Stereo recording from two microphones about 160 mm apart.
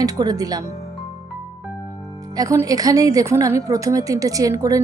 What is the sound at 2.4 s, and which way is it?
A woman's voice, 20° right (ahead or behind).